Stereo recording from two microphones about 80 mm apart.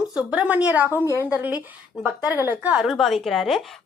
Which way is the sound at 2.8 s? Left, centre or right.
Centre.